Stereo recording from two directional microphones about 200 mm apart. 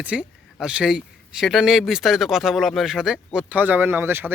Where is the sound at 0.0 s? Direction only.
5° right (ahead or behind).